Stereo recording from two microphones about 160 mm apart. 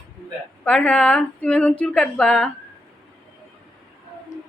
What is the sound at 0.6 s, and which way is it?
Speech, 5° left (ahead or behind).